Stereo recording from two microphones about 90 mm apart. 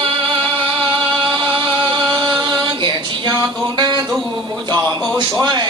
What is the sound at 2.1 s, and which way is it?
Music, 50° right (ahead or behind).